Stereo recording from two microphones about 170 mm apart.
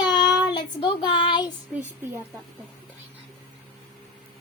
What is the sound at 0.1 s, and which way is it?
Child singing, 25° left (ahead or behind).